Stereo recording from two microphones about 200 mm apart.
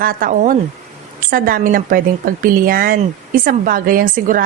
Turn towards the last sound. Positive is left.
turn(degrees=-45)  # may be behind; listen again after turning